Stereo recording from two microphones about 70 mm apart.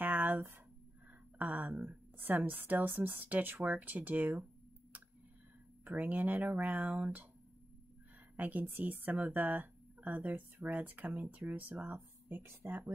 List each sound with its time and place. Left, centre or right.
0.0 s a sound: right
1.4 s a woman's voice: right
5.9 s a woman's voice: right
8.4 s a woman's voice: right